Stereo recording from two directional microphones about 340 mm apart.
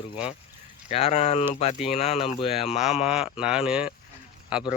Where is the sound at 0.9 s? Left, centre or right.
Centre.